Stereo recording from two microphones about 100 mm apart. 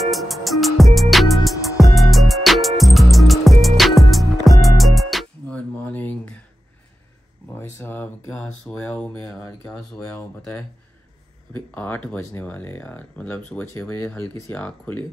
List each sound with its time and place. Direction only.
0.0 s music: centre (ahead or behind)
5.5 s a sound: 15° left (ahead or behind)
7.5 s a sound: 20° left (ahead or behind)
8.8 s speech: 20° left (ahead or behind)
9.7 s speech: 10° left (ahead or behind)
11.5 s speech: 20° left (ahead or behind)